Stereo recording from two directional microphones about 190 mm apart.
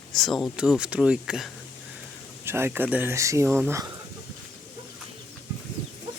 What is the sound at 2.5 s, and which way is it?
Speech, 10° right (ahead or behind).